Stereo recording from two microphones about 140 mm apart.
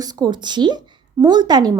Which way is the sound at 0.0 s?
30° right (ahead or behind).